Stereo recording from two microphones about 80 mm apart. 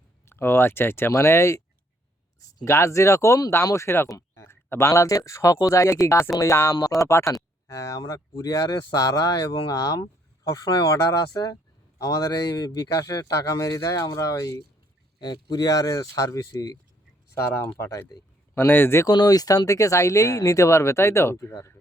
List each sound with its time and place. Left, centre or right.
0.3 s speech: left
2.6 s speech: left
15.2 s speech: left
17.3 s speech: left
19.0 s speech: left